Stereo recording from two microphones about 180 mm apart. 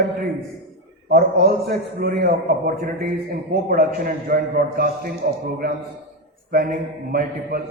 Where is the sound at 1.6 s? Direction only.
60° right (ahead or behind).